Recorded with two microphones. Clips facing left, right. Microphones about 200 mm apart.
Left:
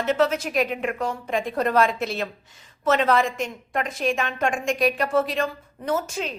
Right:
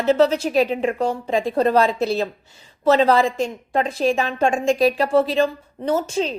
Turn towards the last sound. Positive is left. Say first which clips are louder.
# right 5 dB
turn(degrees=-30)  # may be behind; listen again after turning